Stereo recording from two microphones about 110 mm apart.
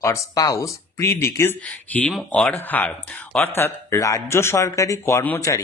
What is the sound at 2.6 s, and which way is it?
Speech, 15° left (ahead or behind).